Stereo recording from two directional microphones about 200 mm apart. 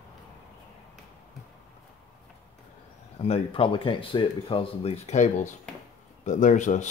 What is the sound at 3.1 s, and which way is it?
Speech, 30° left (ahead or behind).